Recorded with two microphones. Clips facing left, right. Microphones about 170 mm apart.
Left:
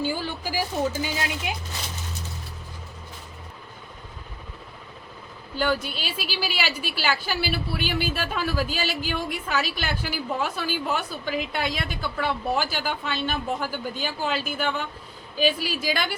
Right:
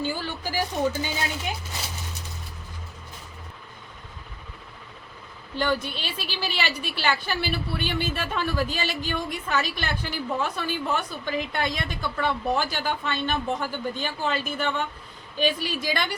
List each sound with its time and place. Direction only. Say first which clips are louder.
0.0 s a woman's voice: left 1 dB; 10° left (ahead or behind)
5.5 s a woman's voice: left 1 dB; 5° left (ahead or behind)